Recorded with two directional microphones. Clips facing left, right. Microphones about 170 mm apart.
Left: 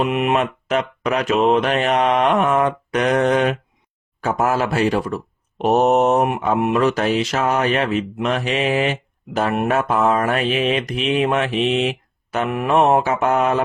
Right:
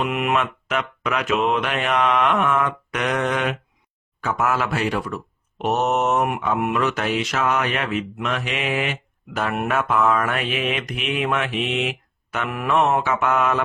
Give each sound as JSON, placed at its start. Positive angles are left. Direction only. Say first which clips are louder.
{"t": 0.0, "sound": "speech", "louder": "left 4 dB", "side_deg": 25}